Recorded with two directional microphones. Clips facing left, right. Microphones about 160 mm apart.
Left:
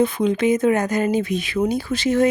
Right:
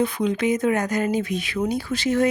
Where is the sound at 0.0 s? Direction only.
25° left (ahead or behind).